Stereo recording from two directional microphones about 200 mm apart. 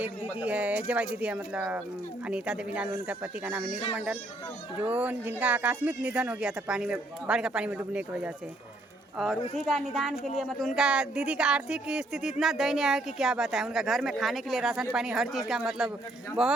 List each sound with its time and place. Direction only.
0.0 s a woman's voice: 5° right (ahead or behind)
3.7 s speech: 30° left (ahead or behind)
3.9 s a woman's voice: 5° right (ahead or behind)